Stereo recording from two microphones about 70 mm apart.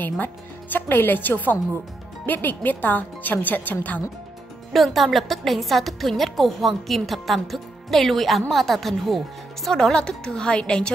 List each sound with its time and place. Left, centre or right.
0.0 s a woman's voice: left
4.7 s a woman's voice: centre